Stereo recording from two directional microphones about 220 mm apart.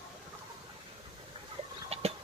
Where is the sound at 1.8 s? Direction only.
25° right (ahead or behind).